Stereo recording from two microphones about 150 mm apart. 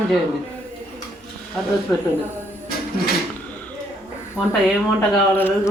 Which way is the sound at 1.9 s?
20° left (ahead or behind).